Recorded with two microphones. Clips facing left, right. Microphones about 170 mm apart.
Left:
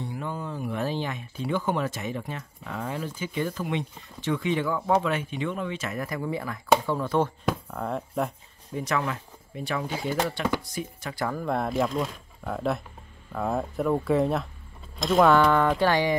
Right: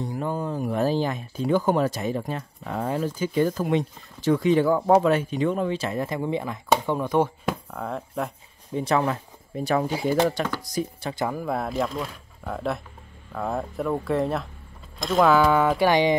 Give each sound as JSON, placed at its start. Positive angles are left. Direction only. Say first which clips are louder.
{"t": 0.0, "sound": "speech", "louder": "right 5 dB", "side_deg": -40}
{"t": 8.7, "sound": "speech", "louder": "right 5 dB", "side_deg": -30}
{"t": 9.8, "sound": "speech", "louder": "right 5 dB", "side_deg": -10}
{"t": 10.6, "sound": "speech", "louder": "right 6 dB", "side_deg": -35}
{"t": 11.2, "sound": "speech", "louder": "left 1 dB", "side_deg": -5}